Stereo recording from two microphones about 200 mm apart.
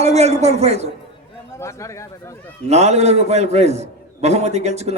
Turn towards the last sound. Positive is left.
turn(degrees=-35)  # may be behind; listen again after turning